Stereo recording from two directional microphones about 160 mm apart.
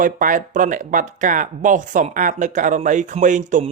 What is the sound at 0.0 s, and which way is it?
Speech, 55° right (ahead or behind).